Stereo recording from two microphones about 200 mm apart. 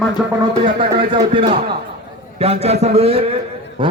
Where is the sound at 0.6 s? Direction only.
25° right (ahead or behind).